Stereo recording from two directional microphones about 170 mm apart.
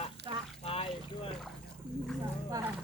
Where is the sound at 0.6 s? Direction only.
35° left (ahead or behind).